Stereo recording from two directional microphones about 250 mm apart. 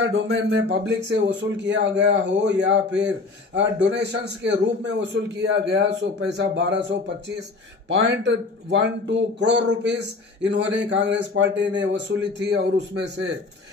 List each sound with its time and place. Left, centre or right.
0.0 s speech: right
7.9 s speech: right